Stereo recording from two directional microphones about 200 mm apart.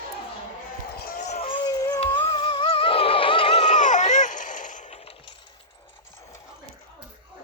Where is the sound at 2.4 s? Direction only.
25° left (ahead or behind).